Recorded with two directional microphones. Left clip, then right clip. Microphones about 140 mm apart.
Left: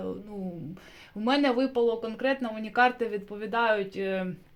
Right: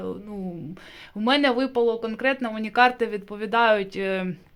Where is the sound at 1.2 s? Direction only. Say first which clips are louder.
Right 4 dB; 20° right (ahead or behind).